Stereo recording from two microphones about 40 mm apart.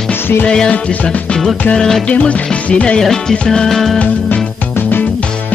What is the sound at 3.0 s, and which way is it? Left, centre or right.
Music, centre.